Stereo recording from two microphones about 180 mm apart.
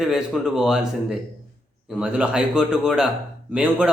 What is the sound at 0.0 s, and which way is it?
A man's voice, 5° right (ahead or behind).